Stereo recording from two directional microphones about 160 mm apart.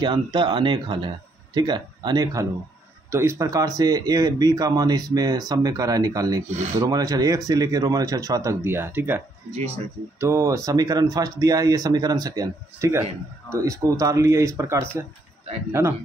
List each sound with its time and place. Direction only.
0.0 s speech: 30° right (ahead or behind)
10.2 s speech: 20° right (ahead or behind)